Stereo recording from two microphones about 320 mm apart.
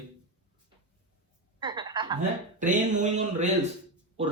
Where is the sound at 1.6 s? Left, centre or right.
Centre.